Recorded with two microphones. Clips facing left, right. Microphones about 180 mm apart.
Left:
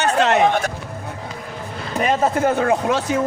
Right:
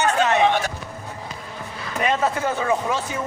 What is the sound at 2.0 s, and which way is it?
Speech, 45° left (ahead or behind).